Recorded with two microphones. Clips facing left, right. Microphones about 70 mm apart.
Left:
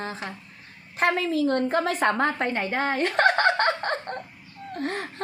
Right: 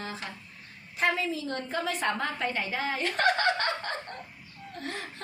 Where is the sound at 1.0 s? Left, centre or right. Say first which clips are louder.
Left 6 dB; left.